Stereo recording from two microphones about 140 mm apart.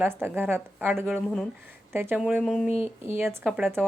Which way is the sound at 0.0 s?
15° right (ahead or behind).